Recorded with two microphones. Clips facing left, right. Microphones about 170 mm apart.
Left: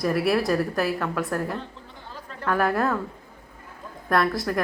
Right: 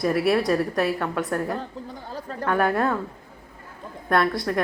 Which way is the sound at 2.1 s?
40° right (ahead or behind).